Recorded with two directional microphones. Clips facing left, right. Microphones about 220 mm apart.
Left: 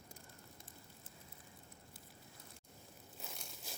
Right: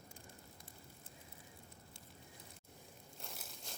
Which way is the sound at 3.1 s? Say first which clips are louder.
Even; centre (ahead or behind).